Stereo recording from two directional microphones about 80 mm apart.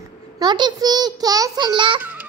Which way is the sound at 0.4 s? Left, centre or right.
Right.